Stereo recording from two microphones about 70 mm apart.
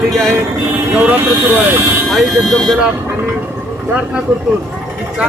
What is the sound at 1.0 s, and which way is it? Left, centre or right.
Speech, right.